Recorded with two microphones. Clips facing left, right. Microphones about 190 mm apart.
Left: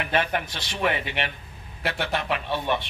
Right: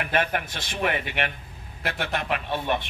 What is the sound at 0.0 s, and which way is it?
A man's voice, 50° right (ahead or behind).